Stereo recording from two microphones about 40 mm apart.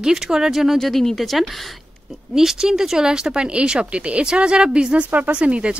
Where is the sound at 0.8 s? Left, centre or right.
Centre.